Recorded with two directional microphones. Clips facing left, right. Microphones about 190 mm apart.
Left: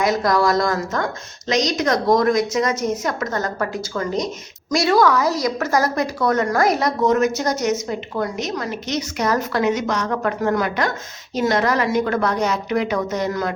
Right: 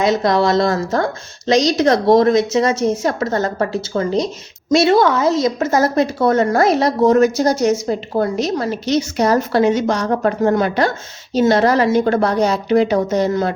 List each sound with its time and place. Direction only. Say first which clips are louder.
0.0 s a woman's voice: right 3 dB; 25° right (ahead or behind)